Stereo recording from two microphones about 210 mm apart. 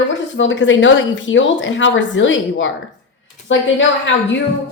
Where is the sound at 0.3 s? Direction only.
60° left (ahead or behind).